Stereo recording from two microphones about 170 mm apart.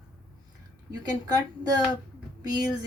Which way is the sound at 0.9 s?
25° right (ahead or behind).